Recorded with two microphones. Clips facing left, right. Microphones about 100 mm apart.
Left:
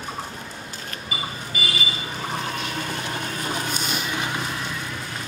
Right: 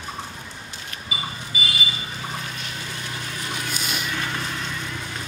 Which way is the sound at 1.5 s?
50° left (ahead or behind).